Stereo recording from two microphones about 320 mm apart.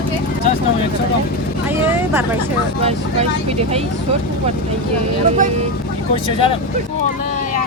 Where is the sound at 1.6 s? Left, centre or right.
Centre.